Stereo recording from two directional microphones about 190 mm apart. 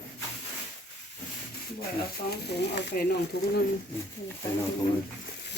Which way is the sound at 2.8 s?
60° left (ahead or behind).